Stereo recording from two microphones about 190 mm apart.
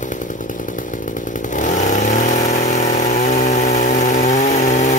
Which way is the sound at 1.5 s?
40° left (ahead or behind).